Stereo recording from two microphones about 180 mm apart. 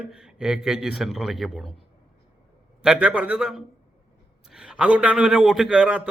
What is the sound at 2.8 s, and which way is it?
A man's voice, 5° right (ahead or behind).